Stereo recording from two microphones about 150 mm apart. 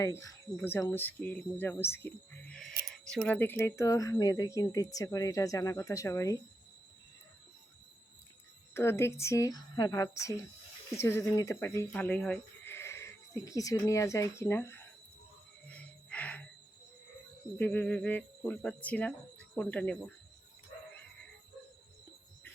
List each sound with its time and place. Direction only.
0.0 s speech: 20° left (ahead or behind)
8.7 s speech: 15° left (ahead or behind)
15.7 s music: 10° left (ahead or behind)
17.6 s speech: 10° left (ahead or behind)